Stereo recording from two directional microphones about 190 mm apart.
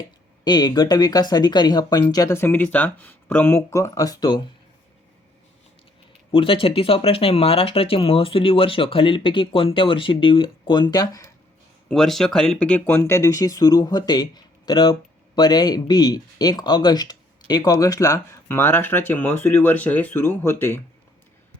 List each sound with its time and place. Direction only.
0.4 s speech: 20° left (ahead or behind)
6.3 s speech: 30° left (ahead or behind)
11.9 s speech: centre (ahead or behind)